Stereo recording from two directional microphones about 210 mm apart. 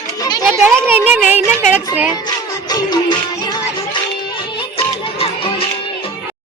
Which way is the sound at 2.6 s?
20° left (ahead or behind).